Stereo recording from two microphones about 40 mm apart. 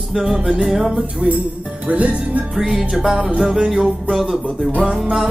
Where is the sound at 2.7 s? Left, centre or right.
Centre.